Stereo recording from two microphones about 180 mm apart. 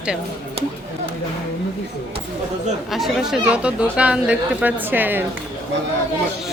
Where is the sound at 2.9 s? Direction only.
Centre (ahead or behind).